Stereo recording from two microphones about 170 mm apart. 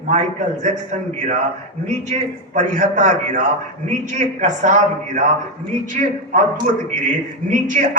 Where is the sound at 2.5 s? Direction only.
45° right (ahead or behind).